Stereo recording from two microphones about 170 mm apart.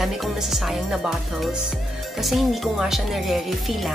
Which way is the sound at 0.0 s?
Centre (ahead or behind).